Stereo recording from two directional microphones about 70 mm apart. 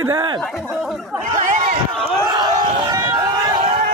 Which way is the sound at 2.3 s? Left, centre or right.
Right.